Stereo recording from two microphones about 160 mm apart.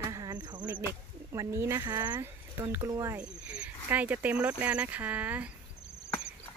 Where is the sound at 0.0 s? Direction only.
25° right (ahead or behind).